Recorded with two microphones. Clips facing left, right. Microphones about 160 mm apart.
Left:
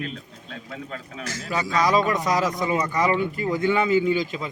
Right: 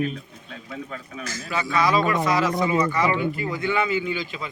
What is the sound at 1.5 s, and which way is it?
A man's voice, 40° left (ahead or behind).